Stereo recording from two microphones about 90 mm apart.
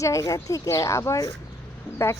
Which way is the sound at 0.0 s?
35° left (ahead or behind).